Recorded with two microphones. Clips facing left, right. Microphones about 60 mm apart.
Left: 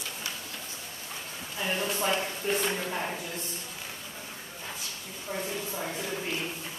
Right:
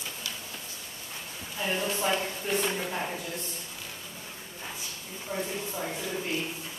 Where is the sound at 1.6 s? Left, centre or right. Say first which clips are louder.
Even; centre.